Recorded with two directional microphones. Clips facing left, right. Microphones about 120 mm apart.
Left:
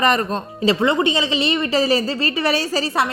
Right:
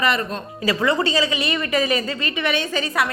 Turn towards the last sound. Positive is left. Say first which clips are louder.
# left 2 dB
turn(degrees=30)  # may be behind; listen again after turning